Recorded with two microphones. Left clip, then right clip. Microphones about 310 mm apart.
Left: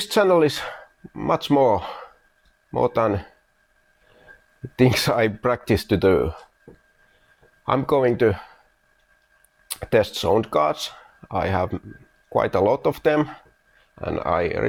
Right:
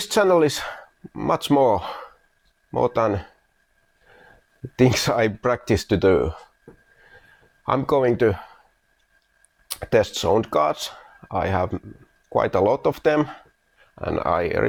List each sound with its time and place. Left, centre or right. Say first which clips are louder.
0.0 s speech: even; left
4.8 s speech: even; left
7.6 s speech: even; centre
9.6 s speech: even; centre